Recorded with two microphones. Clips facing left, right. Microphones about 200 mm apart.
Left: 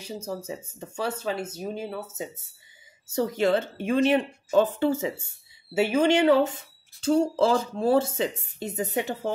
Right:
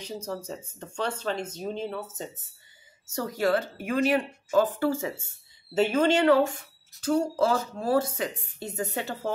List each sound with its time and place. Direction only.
0.0 s speech: 10° left (ahead or behind)
3.2 s speech: 20° left (ahead or behind)